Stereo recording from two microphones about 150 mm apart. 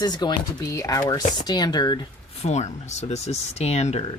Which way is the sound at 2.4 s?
50° left (ahead or behind).